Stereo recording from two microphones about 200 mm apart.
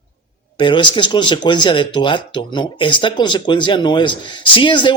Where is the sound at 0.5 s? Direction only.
25° left (ahead or behind).